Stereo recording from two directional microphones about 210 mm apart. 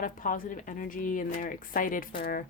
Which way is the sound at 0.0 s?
40° left (ahead or behind).